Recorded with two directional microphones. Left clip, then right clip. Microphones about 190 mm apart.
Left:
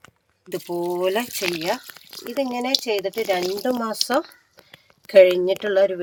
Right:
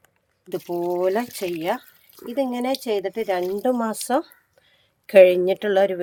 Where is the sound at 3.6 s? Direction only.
30° right (ahead or behind).